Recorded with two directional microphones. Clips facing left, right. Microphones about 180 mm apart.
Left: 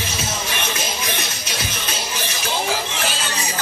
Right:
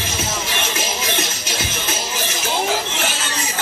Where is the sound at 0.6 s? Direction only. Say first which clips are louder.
Right 2 dB; 25° right (ahead or behind).